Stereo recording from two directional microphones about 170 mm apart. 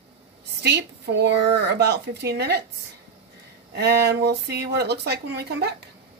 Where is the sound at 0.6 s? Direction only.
80° right.